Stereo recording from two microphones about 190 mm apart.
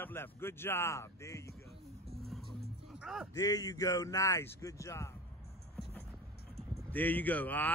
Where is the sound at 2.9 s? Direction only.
Centre (ahead or behind).